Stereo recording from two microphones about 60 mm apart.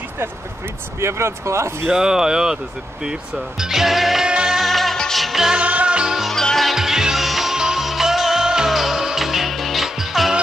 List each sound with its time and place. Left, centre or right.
1.0 s speech: right
1.9 s speech: centre
3.3 s music: centre
4.3 s music: centre
4.6 s music: centre
5.6 s music: right
6.3 s music: centre
6.7 s music: centre